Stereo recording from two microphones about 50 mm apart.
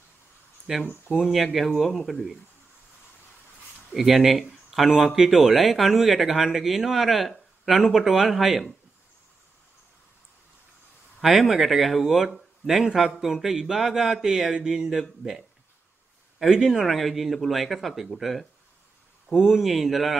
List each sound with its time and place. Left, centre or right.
0.8 s speech: left
1.3 s speech: centre
3.9 s speech: centre
11.1 s speech: centre
16.8 s speech: centre